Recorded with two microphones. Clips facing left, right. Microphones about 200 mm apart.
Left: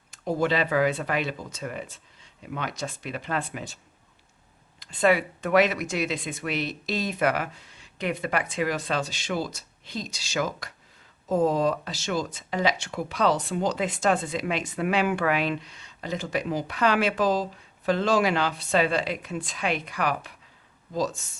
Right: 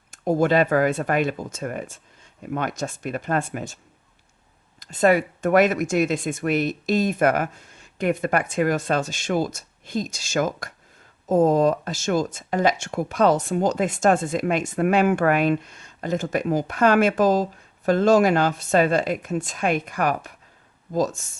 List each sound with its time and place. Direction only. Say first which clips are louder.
0.1 s speech: right 6 dB; 45° right (ahead or behind)
4.8 s speech: right 4 dB; 45° right (ahead or behind)